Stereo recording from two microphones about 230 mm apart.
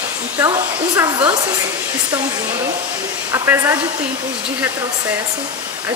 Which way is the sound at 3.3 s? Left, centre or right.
Centre.